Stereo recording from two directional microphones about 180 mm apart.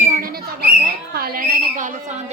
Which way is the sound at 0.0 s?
50° right (ahead or behind).